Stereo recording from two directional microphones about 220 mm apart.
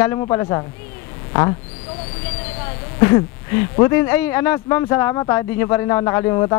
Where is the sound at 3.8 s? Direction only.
15° left (ahead or behind).